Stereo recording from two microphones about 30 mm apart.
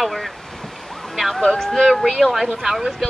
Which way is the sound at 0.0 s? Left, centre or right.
Centre.